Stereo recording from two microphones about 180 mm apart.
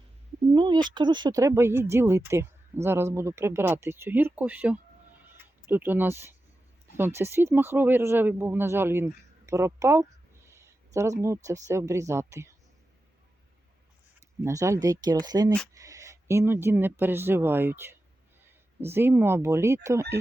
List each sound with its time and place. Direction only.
0.5 s speech: 25° right (ahead or behind)
9.5 s a sound: 15° right (ahead or behind)
11.4 s speech: 15° right (ahead or behind)
14.2 s speech: 15° right (ahead or behind)